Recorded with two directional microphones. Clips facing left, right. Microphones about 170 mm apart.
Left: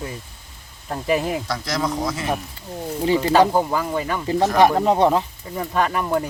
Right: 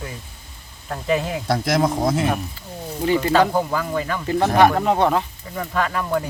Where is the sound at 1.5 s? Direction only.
55° right (ahead or behind).